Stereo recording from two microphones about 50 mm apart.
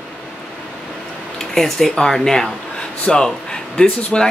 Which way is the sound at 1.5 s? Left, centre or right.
Centre.